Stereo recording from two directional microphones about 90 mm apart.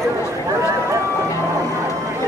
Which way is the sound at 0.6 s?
35° right (ahead or behind).